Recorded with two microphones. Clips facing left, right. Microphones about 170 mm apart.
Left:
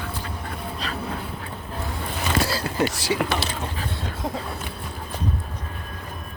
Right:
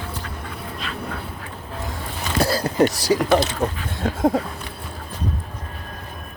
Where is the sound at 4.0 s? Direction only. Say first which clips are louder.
Right 14 dB; 50° right (ahead or behind).